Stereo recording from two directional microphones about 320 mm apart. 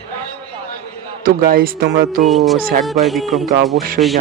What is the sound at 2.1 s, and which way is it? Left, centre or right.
Speech, centre.